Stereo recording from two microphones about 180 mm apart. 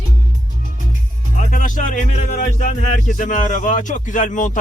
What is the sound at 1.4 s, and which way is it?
Music, 45° left (ahead or behind).